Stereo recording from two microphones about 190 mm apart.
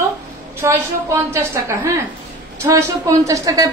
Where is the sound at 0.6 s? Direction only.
15° right (ahead or behind).